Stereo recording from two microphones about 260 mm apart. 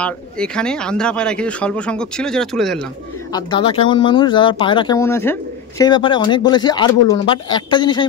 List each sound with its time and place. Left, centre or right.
0.0 s speech: centre
3.3 s speech: centre